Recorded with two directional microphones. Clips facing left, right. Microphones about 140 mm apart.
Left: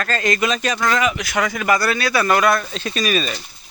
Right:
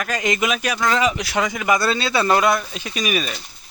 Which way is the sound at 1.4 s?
15° right (ahead or behind).